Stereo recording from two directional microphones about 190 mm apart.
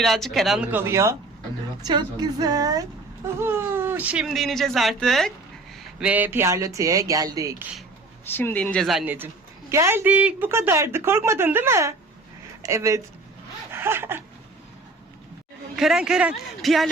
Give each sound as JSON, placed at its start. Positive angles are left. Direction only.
{"t": 0.0, "sound": "a woman's voice", "side_deg": 0}
{"t": 8.2, "sound": "a woman's voice", "side_deg": 10}
{"t": 13.7, "sound": "a sound", "side_deg": -10}
{"t": 15.7, "sound": "speech", "side_deg": -5}